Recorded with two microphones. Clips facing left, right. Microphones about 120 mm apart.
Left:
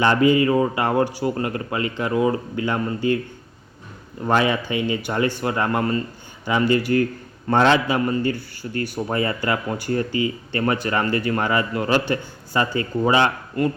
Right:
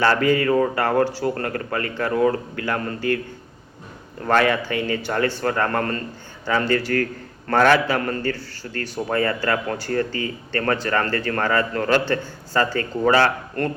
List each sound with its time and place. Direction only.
0.0 s speech: 20° left (ahead or behind)
4.2 s speech: 15° left (ahead or behind)